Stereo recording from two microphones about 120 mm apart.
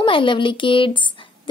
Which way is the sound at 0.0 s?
45° left (ahead or behind).